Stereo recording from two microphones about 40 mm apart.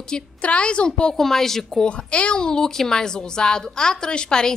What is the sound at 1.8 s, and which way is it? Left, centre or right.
A woman's voice, left.